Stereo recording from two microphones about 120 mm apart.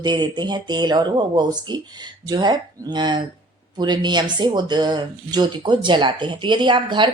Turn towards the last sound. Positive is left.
turn(degrees=-40)  # may be behind; listen again after turning